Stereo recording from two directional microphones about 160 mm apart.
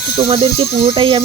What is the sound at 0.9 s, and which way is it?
Speech, 30° right (ahead or behind).